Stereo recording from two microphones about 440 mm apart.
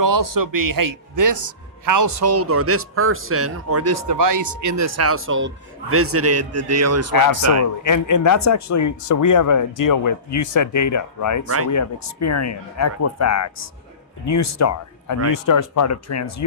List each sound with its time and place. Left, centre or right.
0.0 s a man's voice: right
7.9 s speech: left
11.4 s a man's voice: right
11.7 s speech: left